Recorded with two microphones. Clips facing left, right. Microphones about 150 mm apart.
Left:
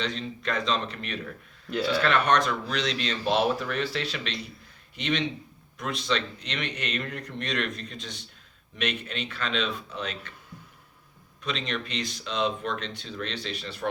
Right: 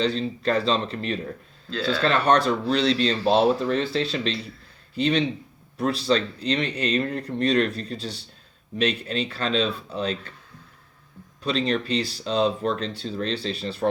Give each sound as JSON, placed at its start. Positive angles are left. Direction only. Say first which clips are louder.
{"t": 0.0, "sound": "speech", "louder": "right 8 dB", "side_deg": -30}
{"t": 11.4, "sound": "speech", "louder": "right 8 dB", "side_deg": -35}